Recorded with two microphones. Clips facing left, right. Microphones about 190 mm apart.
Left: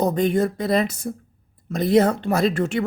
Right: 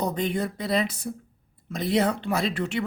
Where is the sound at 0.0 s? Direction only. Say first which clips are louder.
Left 7 dB; 45° left (ahead or behind).